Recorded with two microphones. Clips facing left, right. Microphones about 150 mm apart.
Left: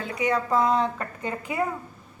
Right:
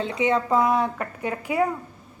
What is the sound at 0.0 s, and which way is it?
A woman's voice, 25° right (ahead or behind).